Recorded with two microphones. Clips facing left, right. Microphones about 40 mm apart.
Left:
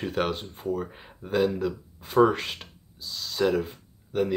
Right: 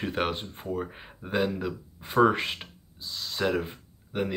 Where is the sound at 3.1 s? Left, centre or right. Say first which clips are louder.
Left 3 dB; centre.